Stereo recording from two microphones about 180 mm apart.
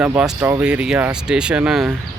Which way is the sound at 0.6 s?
5° right (ahead or behind).